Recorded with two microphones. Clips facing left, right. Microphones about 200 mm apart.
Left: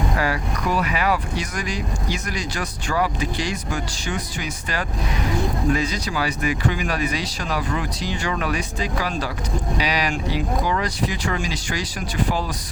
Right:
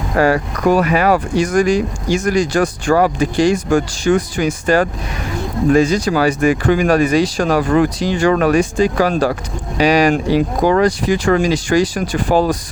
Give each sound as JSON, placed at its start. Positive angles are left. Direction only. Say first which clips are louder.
{"t": 0.2, "sound": "speech", "louder": "right 10 dB", "side_deg": -50}